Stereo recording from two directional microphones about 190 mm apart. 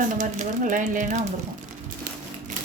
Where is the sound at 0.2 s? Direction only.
40° right (ahead or behind).